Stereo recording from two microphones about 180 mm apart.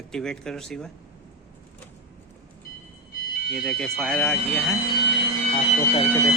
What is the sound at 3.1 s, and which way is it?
Smoke detector, 55° left (ahead or behind).